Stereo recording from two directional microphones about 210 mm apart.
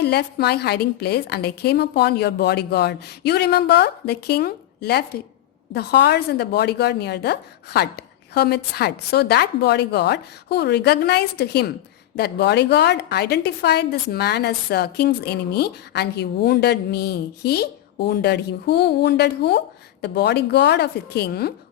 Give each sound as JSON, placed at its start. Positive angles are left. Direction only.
{"t": 0.0, "sound": "a woman's voice", "side_deg": 50}